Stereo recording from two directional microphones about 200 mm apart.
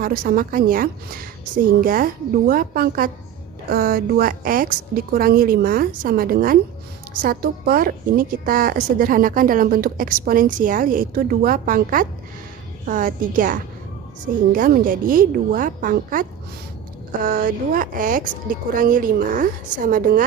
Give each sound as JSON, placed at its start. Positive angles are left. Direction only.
{"t": 0.0, "sound": "a woman's voice", "side_deg": -45}